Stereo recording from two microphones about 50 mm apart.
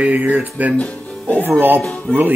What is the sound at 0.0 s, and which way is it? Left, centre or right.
Speech, right.